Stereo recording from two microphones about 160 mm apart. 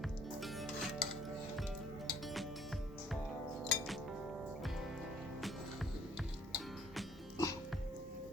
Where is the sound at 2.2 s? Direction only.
Centre (ahead or behind).